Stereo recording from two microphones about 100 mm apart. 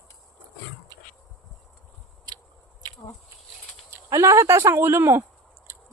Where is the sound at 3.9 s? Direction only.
30° right (ahead or behind).